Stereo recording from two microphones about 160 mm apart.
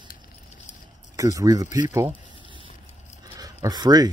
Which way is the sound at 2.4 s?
30° right (ahead or behind).